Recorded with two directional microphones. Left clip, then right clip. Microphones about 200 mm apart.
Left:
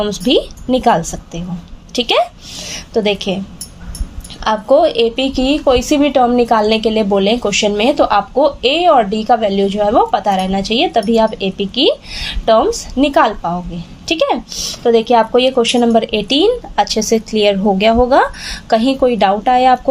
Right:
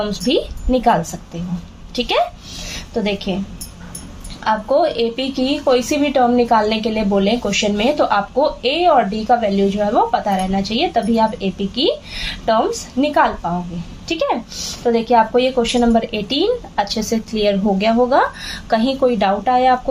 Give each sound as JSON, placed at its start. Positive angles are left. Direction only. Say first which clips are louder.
{"t": 0.0, "sound": "a woman's voice", "louder": "left 4 dB", "side_deg": 40}
{"t": 4.4, "sound": "a woman's voice", "louder": "left 4 dB", "side_deg": 40}